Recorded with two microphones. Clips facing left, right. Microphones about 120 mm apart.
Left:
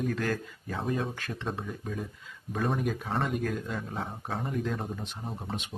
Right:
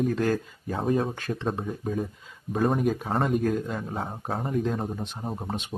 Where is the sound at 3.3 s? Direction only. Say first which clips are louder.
Right 6 dB; 30° right (ahead or behind).